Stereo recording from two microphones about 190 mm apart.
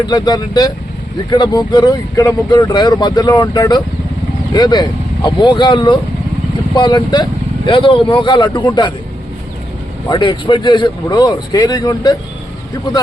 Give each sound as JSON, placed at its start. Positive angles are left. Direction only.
{"t": 0.0, "sound": "speech", "side_deg": 20}
{"t": 10.1, "sound": "speech", "side_deg": 25}